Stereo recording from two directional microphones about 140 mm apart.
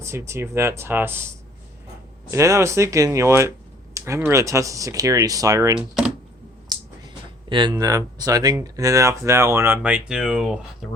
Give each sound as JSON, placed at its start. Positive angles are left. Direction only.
{"t": 0.0, "sound": "speech", "side_deg": -20}
{"t": 2.3, "sound": "speech", "side_deg": -20}
{"t": 6.7, "sound": "a sound", "side_deg": -30}
{"t": 7.5, "sound": "speech", "side_deg": -35}